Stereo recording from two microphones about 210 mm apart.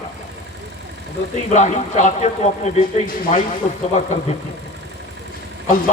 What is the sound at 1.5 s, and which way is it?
Speech, 35° left (ahead or behind).